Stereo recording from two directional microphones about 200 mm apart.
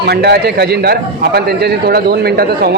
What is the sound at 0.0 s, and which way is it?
A man's voice, 55° right (ahead or behind).